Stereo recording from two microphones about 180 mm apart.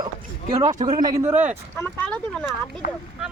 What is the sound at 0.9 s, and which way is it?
Speech, 20° right (ahead or behind).